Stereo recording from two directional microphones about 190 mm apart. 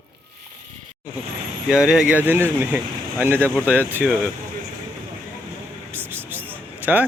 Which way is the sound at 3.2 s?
10° right (ahead or behind).